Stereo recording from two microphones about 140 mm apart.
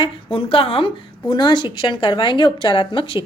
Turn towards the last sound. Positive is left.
turn(degrees=40)  # may be behind; listen again after turning